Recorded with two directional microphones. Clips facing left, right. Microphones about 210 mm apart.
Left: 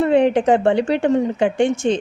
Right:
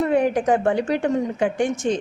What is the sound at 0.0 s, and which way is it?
A woman's voice, 25° left (ahead or behind).